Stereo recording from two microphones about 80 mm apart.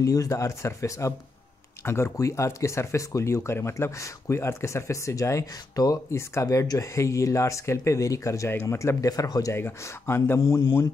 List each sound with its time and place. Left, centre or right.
0.0 s speech: left
9.6 s speech: left